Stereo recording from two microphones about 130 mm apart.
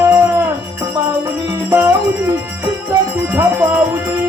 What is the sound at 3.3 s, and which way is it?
Music, 15° right (ahead or behind).